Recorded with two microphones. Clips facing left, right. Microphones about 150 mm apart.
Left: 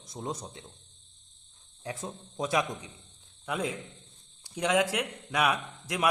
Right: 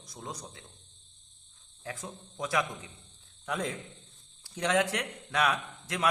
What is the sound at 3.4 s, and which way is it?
A man's voice, 10° left (ahead or behind).